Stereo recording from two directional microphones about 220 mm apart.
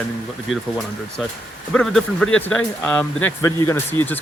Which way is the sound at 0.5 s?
Centre (ahead or behind).